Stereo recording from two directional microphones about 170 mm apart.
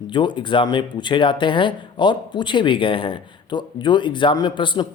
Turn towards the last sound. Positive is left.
turn(degrees=30)  # may be behind; listen again after turning